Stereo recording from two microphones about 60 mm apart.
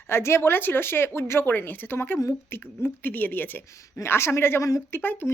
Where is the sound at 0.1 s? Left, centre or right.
Left.